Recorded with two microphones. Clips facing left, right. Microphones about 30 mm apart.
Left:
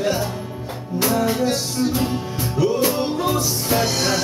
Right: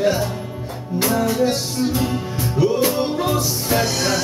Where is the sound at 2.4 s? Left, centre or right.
Centre.